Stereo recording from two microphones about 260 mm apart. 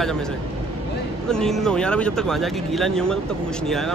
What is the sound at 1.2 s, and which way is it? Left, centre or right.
Speech, centre.